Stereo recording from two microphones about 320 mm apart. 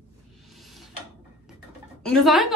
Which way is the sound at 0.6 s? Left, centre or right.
Centre.